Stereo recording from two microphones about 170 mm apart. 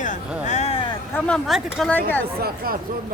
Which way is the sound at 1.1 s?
5° left (ahead or behind).